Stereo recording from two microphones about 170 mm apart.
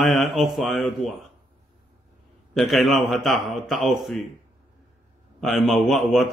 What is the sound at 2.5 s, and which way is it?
A man's voice, centre (ahead or behind).